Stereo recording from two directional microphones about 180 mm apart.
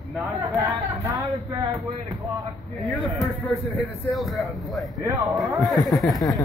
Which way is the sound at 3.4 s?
Centre (ahead or behind).